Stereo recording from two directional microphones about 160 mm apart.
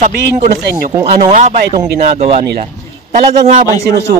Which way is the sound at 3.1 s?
55° right (ahead or behind).